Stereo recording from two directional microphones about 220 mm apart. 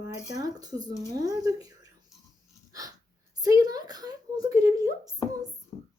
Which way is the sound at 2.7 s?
15° right (ahead or behind).